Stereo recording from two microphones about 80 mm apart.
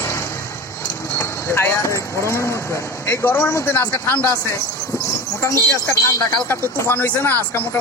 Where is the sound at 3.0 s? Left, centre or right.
Left.